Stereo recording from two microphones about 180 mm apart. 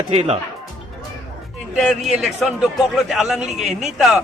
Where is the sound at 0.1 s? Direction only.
35° right (ahead or behind).